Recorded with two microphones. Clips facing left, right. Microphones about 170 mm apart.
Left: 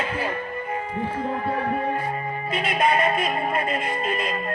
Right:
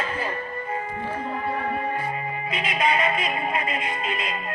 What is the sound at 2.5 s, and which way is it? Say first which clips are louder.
Music: left 3 dB; 50° left (ahead or behind).